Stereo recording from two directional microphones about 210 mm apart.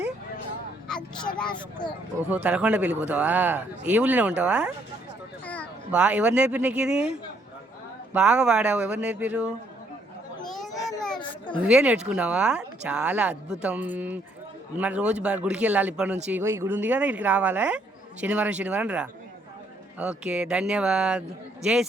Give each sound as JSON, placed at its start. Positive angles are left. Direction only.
{"t": 0.9, "sound": "a sound", "side_deg": 5}
{"t": 2.2, "sound": "speech", "side_deg": -5}
{"t": 5.9, "sound": "speech", "side_deg": -5}
{"t": 10.8, "sound": "children playing", "side_deg": 0}
{"t": 11.2, "sound": "children playing", "side_deg": 25}
{"t": 11.6, "sound": "speech", "side_deg": -5}